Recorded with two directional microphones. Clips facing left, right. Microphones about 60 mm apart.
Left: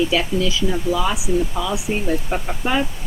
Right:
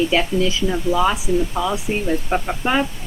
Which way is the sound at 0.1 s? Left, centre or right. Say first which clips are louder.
Right 1 dB; right.